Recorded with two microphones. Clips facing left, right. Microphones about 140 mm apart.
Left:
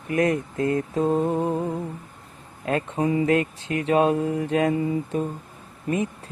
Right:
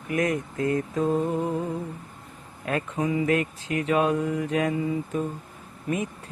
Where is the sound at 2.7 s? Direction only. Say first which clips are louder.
Left 3 dB; 30° left (ahead or behind).